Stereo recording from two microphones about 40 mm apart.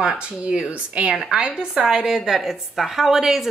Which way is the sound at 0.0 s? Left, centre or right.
Right.